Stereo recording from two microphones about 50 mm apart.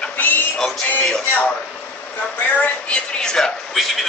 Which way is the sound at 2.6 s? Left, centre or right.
Left.